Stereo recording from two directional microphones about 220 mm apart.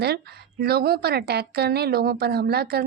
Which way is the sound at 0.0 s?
45° right (ahead or behind).